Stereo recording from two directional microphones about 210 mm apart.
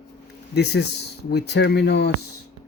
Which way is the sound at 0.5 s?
50° left (ahead or behind).